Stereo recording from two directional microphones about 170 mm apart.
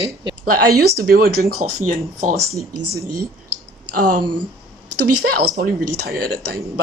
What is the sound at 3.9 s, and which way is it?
Speech, 55° right (ahead or behind).